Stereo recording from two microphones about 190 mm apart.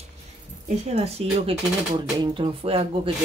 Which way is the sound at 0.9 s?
35° right (ahead or behind).